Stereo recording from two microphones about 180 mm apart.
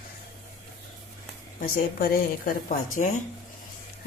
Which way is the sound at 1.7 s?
55° left (ahead or behind).